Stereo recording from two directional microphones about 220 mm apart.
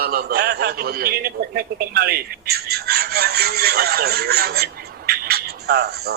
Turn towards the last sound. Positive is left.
turn(degrees=-45)  # may be behind; listen again after turning